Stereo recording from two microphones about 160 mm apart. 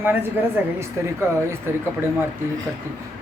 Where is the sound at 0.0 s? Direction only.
10° right (ahead or behind).